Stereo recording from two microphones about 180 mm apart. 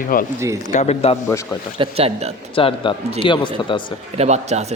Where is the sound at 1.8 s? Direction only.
35° right (ahead or behind).